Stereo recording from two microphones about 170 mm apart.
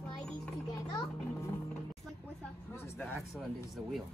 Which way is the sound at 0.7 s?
20° left (ahead or behind).